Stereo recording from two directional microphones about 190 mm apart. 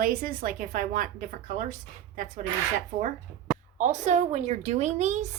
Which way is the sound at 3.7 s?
40° right (ahead or behind).